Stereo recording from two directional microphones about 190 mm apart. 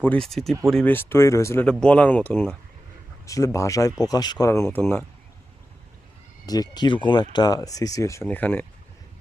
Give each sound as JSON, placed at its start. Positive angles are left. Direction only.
{"t": 0.0, "sound": "speech", "side_deg": 5}
{"t": 6.4, "sound": "speech", "side_deg": 20}